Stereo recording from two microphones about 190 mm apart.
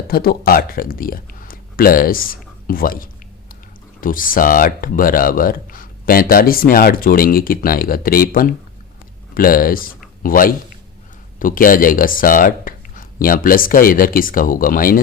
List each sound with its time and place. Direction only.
0.1 s speech: 50° left (ahead or behind)